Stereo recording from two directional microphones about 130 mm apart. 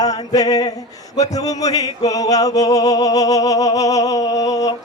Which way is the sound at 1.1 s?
30° left (ahead or behind).